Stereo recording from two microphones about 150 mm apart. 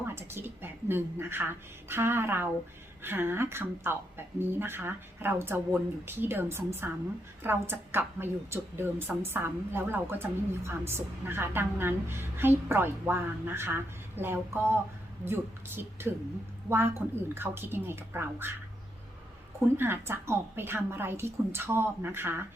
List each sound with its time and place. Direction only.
0.0 s a woman's voice: 15° right (ahead or behind)
19.7 s a woman's voice: 15° right (ahead or behind)